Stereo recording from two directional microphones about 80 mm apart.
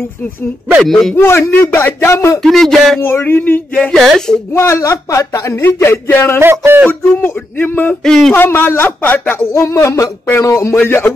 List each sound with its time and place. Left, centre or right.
0.8 s speech: centre
1.1 s speech: left
2.4 s speech: centre
3.0 s speech: left
3.9 s speech: centre
4.6 s speech: left
6.4 s speech: right
7.6 s speech: left
8.0 s speech: centre
8.3 s speech: left